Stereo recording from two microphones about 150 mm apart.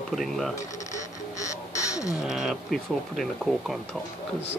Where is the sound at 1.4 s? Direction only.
20° left (ahead or behind).